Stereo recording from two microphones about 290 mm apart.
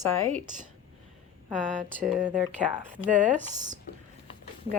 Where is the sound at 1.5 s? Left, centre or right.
Centre.